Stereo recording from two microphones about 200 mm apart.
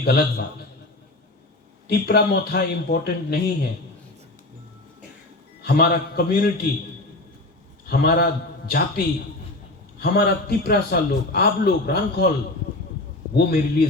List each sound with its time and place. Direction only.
0.0 s a man's voice: 50° left (ahead or behind)
1.9 s a man's voice: 55° left (ahead or behind)
5.6 s a man's voice: 50° left (ahead or behind)
7.9 s a man's voice: 50° left (ahead or behind)
13.3 s a man's voice: 50° left (ahead or behind)